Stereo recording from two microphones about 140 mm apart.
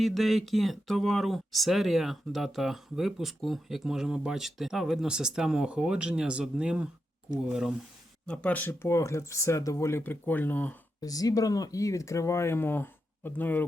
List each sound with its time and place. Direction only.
0.0 s speech: centre (ahead or behind)
8.3 s speech: 10° left (ahead or behind)
11.0 s speech: 25° left (ahead or behind)